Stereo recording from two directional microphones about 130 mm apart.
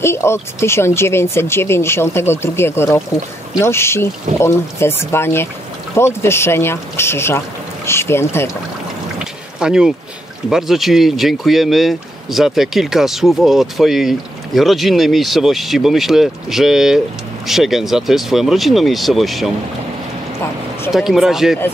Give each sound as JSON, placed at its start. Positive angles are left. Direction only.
{"t": 0.0, "sound": "speech", "side_deg": 20}
{"t": 9.2, "sound": "pour", "side_deg": -5}
{"t": 10.5, "sound": "speech", "side_deg": 0}
{"t": 20.9, "sound": "speech", "side_deg": 0}